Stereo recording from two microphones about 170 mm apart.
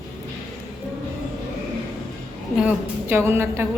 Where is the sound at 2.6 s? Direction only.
10° right (ahead or behind).